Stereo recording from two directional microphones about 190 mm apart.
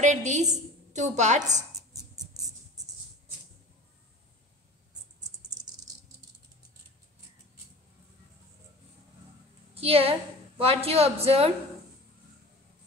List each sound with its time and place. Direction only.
0.0 s a man's voice: 40° right (ahead or behind)
2.0 s music: 20° right (ahead or behind)
9.8 s a woman's voice: 30° right (ahead or behind)